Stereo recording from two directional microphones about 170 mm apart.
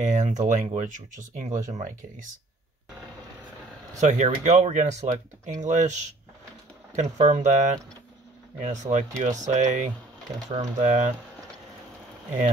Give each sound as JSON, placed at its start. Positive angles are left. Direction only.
{"t": 0.0, "sound": "speech", "side_deg": -45}
{"t": 4.0, "sound": "speech", "side_deg": -45}
{"t": 7.0, "sound": "speech", "side_deg": -45}